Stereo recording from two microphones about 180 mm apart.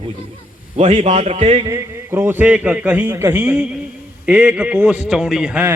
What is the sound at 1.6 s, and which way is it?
A man's voice, 15° right (ahead or behind).